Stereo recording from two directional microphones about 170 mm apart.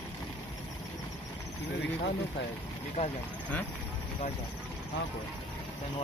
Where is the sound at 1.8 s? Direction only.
85° left.